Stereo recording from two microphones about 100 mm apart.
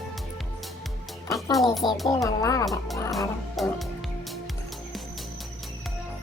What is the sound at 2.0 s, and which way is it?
Speech, 35° left (ahead or behind).